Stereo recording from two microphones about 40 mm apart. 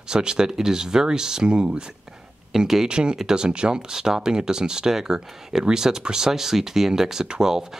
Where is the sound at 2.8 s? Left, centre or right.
Right.